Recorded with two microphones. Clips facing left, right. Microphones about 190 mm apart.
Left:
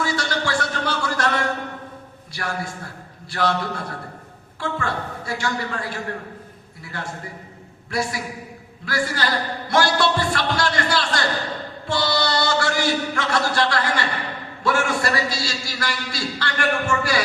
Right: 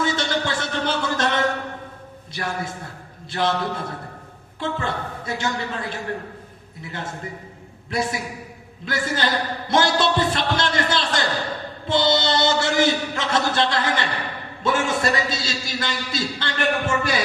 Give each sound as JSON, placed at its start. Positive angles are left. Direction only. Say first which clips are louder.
{"t": 0.0, "sound": "music", "louder": "right 1 dB", "side_deg": -20}
{"t": 2.3, "sound": "a man's voice", "louder": "right 1 dB", "side_deg": -20}
{"t": 8.8, "sound": "music", "louder": "even", "side_deg": -20}
{"t": 11.9, "sound": "chant", "louder": "right 3 dB", "side_deg": -20}
{"t": 14.6, "sound": "a man's voice", "louder": "even", "side_deg": -20}